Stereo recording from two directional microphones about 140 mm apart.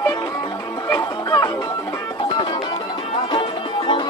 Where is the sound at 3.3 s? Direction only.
35° left (ahead or behind).